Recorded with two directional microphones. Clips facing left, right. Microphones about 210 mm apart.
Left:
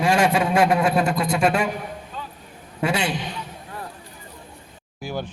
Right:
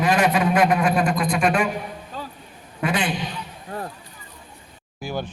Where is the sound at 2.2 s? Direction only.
35° right (ahead or behind).